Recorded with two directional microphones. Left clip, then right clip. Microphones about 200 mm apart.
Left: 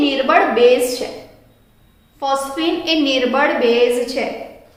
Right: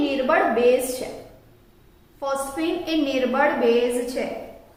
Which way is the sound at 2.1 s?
35° left (ahead or behind).